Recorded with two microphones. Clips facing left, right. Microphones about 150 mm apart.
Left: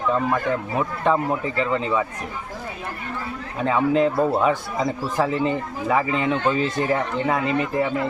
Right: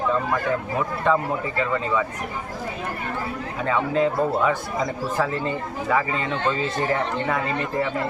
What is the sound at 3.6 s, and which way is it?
Speech, 15° left (ahead or behind).